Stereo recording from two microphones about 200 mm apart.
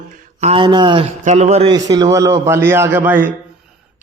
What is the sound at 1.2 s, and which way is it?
Speech, 35° right (ahead or behind).